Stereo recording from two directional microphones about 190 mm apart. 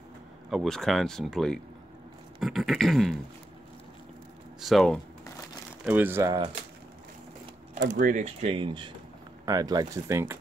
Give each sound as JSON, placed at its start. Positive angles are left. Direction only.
{"t": 0.5, "sound": "speech", "side_deg": 0}
{"t": 4.6, "sound": "speech", "side_deg": 0}
{"t": 5.9, "sound": "speech", "side_deg": -10}
{"t": 7.9, "sound": "speech", "side_deg": -40}